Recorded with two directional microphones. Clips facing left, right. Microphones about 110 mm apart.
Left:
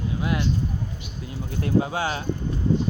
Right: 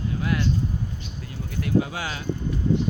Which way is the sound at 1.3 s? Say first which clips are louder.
Left 1 dB; 30° left (ahead or behind).